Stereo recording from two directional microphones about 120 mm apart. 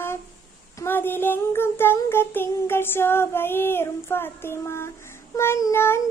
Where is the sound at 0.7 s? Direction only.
20° left (ahead or behind).